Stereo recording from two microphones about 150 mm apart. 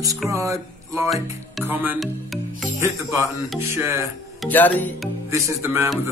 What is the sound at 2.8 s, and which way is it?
Speech, 20° right (ahead or behind).